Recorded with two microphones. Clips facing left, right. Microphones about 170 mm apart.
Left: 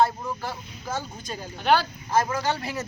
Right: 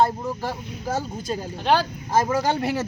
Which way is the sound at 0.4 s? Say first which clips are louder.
Right 5 dB; 35° right (ahead or behind).